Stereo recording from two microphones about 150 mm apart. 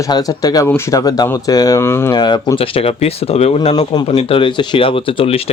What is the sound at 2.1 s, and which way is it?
Speech, 30° left (ahead or behind).